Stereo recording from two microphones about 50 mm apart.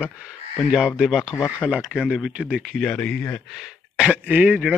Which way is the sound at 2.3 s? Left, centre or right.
Right.